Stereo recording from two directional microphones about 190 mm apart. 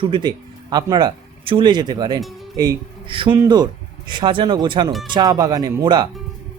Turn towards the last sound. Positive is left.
turn(degrees=-25)  # may be behind; listen again after turning